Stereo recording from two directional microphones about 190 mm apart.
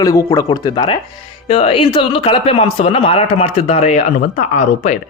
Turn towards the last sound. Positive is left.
turn(degrees=40)  # may be behind; listen again after turning